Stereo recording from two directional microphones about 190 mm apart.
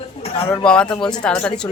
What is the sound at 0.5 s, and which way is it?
A woman's voice, 5° left (ahead or behind).